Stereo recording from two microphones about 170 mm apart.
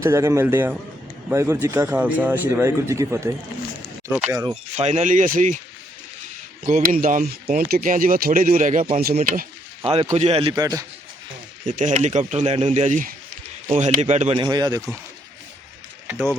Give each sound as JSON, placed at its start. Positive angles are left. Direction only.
{"t": 0.0, "sound": "speech", "side_deg": -15}
{"t": 4.8, "sound": "speech", "side_deg": -40}
{"t": 6.7, "sound": "speech", "side_deg": -55}
{"t": 9.8, "sound": "a man's voice", "side_deg": -35}
{"t": 10.5, "sound": "speech", "side_deg": -20}
{"t": 11.8, "sound": "speech", "side_deg": -45}
{"t": 14.3, "sound": "speech", "side_deg": -25}